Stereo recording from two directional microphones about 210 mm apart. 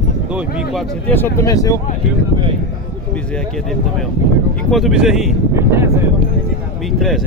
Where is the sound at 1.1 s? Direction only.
15° left (ahead or behind).